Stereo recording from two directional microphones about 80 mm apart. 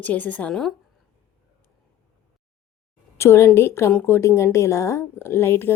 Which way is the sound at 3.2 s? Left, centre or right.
Left.